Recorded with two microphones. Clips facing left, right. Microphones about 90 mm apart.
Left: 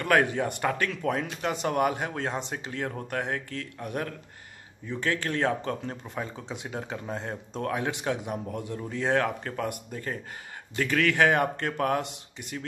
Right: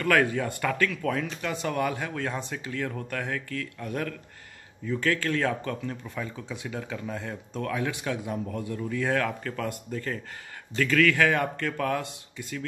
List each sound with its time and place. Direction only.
0.0 s speech: 25° left (ahead or behind)